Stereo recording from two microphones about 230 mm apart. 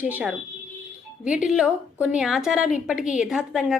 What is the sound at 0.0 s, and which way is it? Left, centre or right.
A woman's voice, centre.